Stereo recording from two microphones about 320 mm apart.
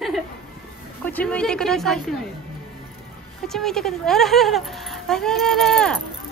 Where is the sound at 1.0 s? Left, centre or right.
Centre.